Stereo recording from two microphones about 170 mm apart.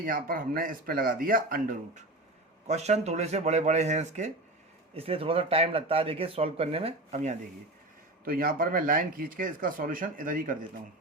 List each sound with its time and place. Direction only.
0.0 s speech: 55° right (ahead or behind)
2.6 s speech: 40° right (ahead or behind)
8.2 s speech: 60° right (ahead or behind)